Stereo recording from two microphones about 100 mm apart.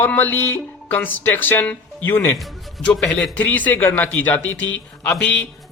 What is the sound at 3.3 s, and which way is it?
Speech, 15° left (ahead or behind).